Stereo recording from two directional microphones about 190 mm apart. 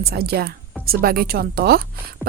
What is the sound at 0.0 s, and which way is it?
A woman's voice, 55° right (ahead or behind).